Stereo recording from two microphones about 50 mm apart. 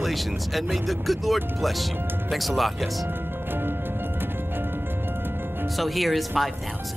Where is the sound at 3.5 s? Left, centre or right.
Right.